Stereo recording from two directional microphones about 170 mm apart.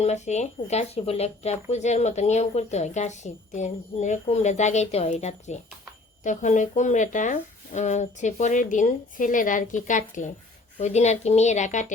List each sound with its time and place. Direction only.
0.0 s speech: 40° left (ahead or behind)